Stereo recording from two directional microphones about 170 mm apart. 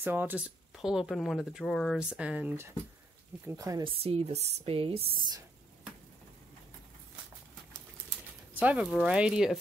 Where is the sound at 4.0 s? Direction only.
35° right (ahead or behind).